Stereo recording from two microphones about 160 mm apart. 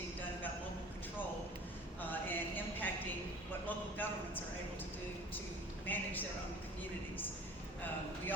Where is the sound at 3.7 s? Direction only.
10° left (ahead or behind).